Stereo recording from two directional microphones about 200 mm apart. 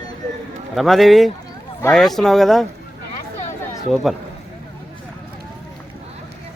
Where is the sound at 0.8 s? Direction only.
Centre (ahead or behind).